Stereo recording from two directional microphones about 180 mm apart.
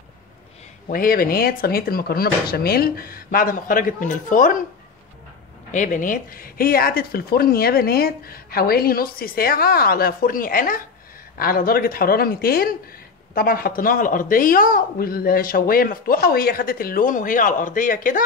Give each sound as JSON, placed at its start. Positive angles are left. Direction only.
{"t": 0.8, "sound": "speech", "side_deg": 50}
{"t": 5.7, "sound": "speech", "side_deg": 45}